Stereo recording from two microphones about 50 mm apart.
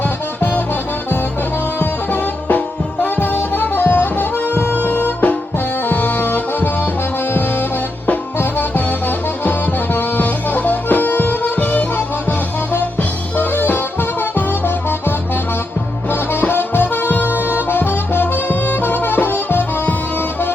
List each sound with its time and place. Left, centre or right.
0.0 s music: left
1.8 s music: left